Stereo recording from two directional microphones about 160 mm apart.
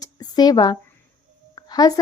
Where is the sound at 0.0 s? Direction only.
25° left (ahead or behind).